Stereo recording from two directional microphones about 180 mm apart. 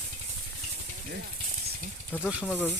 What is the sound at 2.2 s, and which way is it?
Speech, 5° right (ahead or behind).